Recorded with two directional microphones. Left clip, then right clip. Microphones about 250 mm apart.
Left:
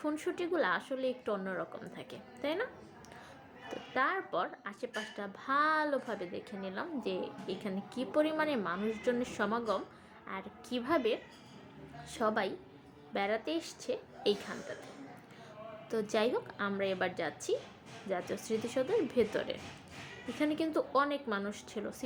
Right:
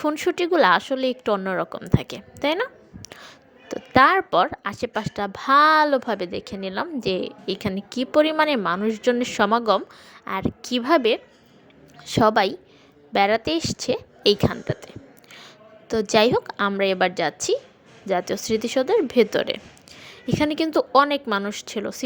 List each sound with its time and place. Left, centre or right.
0.0 s a woman's voice: right
15.9 s a woman's voice: right